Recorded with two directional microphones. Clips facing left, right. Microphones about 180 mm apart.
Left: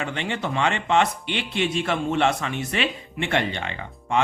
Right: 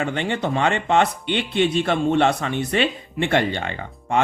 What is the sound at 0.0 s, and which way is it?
A man's voice, 35° right (ahead or behind).